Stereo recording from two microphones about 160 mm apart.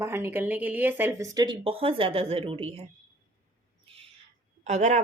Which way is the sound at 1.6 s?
35° right (ahead or behind).